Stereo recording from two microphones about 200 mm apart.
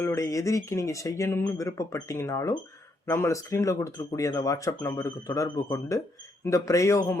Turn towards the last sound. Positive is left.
turn(degrees=15)  # may be behind; listen again after turning